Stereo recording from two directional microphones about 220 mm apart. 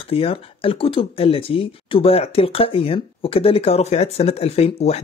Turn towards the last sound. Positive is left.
turn(degrees=30)  # may be behind; listen again after turning